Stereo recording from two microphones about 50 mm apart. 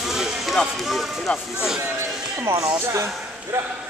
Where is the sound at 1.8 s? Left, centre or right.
Right.